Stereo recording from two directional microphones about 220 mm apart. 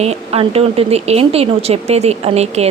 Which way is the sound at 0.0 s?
30° right (ahead or behind).